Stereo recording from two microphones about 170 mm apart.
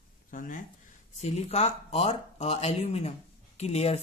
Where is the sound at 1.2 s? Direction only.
40° left (ahead or behind).